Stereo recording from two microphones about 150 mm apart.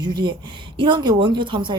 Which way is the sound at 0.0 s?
30° right (ahead or behind).